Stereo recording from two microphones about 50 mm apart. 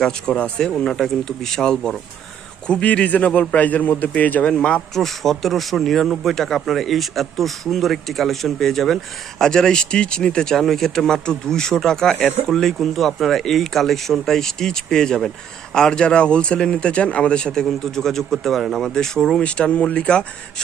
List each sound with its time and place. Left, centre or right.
0.0 s speech: left
0.9 s a man's voice: centre
2.6 s a man's voice: left
4.5 s speech: left
4.9 s a man's voice: centre
19.4 s speech: left